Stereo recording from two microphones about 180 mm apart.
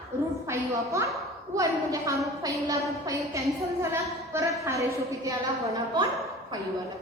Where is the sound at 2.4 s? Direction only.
20° right (ahead or behind).